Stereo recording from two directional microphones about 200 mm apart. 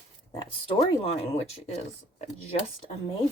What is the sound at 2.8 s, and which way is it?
Speech, 30° left (ahead or behind).